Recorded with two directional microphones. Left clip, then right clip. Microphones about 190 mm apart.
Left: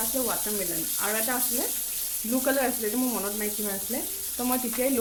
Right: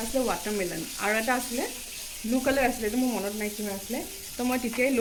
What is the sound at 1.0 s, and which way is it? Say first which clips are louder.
Sizzle: right 4 dB; 25° right (ahead or behind).